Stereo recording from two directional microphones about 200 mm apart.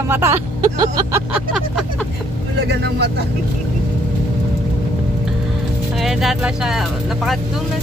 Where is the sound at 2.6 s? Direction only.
55° right (ahead or behind).